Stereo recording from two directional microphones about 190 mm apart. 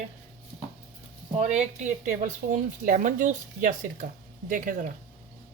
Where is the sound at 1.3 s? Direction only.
35° right (ahead or behind).